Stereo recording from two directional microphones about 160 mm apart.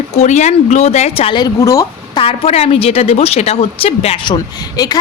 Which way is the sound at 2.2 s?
35° left (ahead or behind).